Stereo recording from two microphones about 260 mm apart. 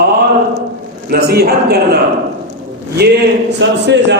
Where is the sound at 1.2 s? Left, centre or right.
Right.